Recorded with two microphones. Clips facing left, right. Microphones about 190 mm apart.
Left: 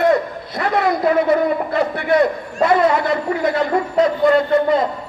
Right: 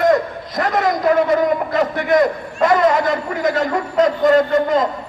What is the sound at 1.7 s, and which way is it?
A man's voice, 45° right (ahead or behind).